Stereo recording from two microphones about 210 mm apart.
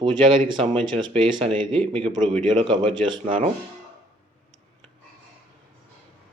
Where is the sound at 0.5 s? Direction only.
20° right (ahead or behind).